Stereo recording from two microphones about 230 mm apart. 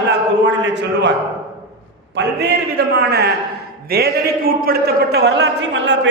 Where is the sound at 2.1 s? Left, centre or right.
Right.